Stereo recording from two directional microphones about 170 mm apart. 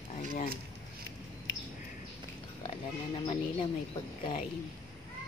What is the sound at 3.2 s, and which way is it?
Speech, 30° left (ahead or behind).